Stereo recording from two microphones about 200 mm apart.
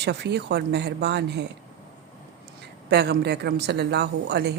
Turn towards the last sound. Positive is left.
turn(degrees=-55)  # may be behind; listen again after turning